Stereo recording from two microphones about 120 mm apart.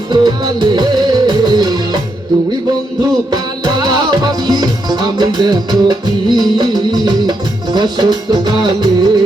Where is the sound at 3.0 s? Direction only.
35° right (ahead or behind).